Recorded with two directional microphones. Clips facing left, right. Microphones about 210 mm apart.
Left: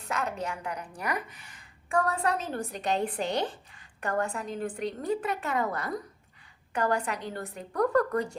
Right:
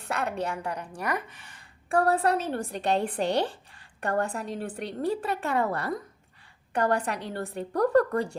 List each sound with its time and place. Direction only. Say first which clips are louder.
0.0 s speech: right 2 dB; 35° right (ahead or behind)